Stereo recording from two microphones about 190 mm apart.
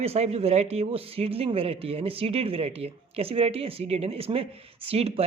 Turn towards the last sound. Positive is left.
turn(degrees=-30)  # may be behind; listen again after turning